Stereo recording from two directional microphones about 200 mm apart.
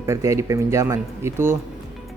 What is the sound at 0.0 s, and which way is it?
Speech, 15° right (ahead or behind).